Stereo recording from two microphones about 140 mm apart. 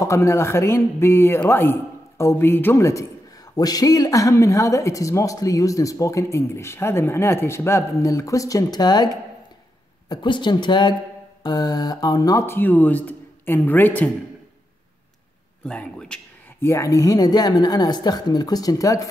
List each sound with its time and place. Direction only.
0.0 s speech: 20° left (ahead or behind)
15.6 s speech: 5° left (ahead or behind)
16.6 s speech: 20° left (ahead or behind)